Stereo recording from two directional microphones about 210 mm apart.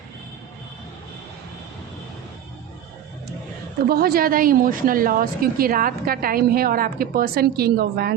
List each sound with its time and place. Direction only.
3.8 s a woman's voice: 45° right (ahead or behind)